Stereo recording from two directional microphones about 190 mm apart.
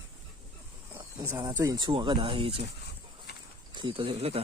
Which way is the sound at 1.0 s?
20° right (ahead or behind).